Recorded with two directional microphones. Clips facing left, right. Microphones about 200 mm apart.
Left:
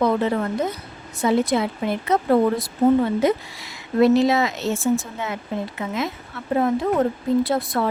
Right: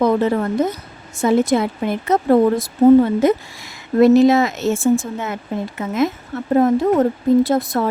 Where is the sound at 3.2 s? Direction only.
50° right (ahead or behind).